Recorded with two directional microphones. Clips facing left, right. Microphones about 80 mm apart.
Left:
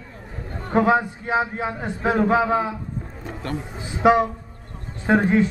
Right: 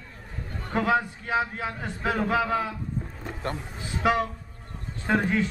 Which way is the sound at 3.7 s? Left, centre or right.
Left.